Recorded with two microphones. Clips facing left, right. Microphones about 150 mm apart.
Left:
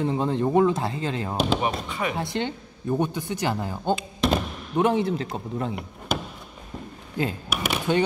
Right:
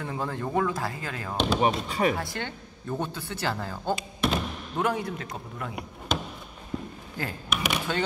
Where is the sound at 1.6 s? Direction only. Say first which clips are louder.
Right 3 dB; 35° right (ahead or behind).